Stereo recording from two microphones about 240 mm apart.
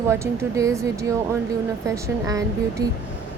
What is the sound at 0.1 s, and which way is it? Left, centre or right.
Speech, centre.